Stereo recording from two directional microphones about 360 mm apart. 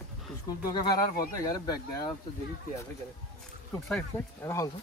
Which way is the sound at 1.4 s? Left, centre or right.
Centre.